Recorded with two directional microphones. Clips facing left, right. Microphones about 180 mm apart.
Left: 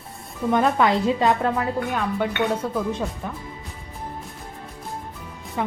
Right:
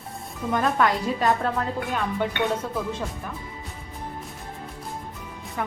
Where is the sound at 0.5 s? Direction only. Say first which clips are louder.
Left 3 dB; 20° left (ahead or behind).